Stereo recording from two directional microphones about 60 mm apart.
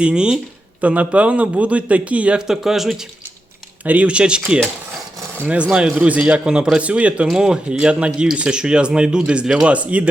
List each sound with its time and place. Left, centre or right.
0.0 s a man's voice: centre
2.5 s speech: centre
3.8 s speech: right
5.7 s a man's voice: centre